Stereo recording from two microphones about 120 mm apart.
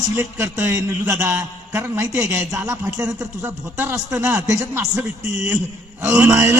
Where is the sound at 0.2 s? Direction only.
25° right (ahead or behind).